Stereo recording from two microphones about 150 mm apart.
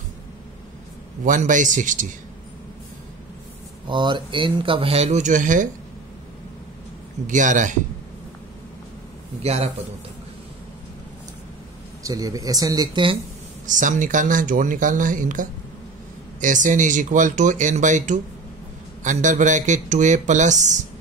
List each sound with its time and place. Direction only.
1.2 s speech: 60° right (ahead or behind)
3.8 s speech: 30° right (ahead or behind); by 5.7 s 60° right (ahead or behind)
7.2 s speech: 55° right (ahead or behind)
9.4 s a man's voice: 45° right (ahead or behind)
12.0 s speech: 25° right (ahead or behind)
13.7 s speech: 60° right (ahead or behind)